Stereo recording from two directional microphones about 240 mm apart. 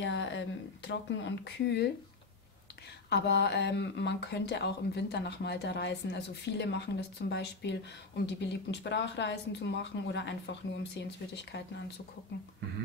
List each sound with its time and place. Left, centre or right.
0.0 s speech: left
3.1 s speech: left